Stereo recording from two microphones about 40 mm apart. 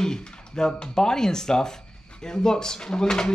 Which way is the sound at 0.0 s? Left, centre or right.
Centre.